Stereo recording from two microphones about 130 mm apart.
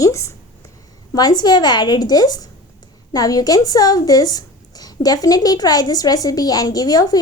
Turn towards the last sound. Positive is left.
turn(degrees=30)  # may be behind; listen again after turning